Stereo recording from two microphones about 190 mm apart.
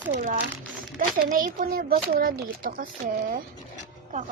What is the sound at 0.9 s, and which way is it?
A woman's voice, 45° right (ahead or behind).